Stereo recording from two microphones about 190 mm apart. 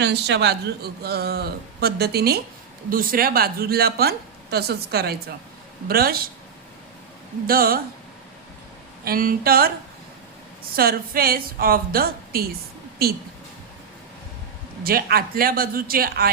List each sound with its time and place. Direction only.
0.0 s a man's voice: 65° right (ahead or behind)
7.4 s a woman's voice: 50° right (ahead or behind)
9.0 s a woman's voice: 50° right (ahead or behind)
10.8 s a woman's voice: 50° right (ahead or behind)
14.8 s a woman's voice: 55° right (ahead or behind)